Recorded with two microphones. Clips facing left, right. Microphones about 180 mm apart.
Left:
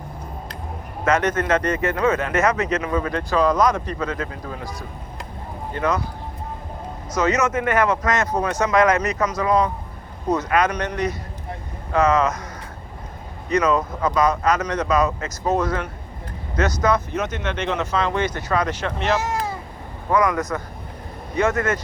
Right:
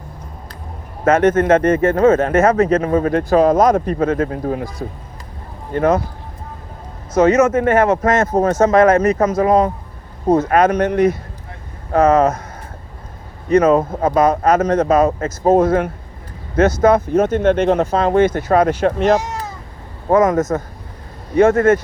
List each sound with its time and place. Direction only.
1.0 s speech: 50° right (ahead or behind)
7.1 s speech: 50° right (ahead or behind)
13.5 s speech: 50° right (ahead or behind)